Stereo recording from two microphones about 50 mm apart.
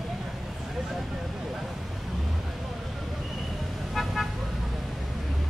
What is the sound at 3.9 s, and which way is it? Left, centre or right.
Vehicle, centre.